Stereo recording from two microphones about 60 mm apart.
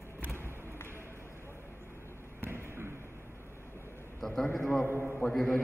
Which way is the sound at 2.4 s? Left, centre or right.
Right.